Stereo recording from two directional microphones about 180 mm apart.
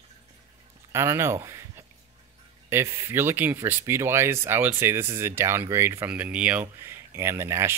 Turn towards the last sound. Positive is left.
turn(degrees=-15)  # may be behind; listen again after turning